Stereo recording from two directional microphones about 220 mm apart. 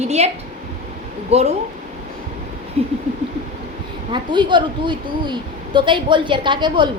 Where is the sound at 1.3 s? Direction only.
30° right (ahead or behind).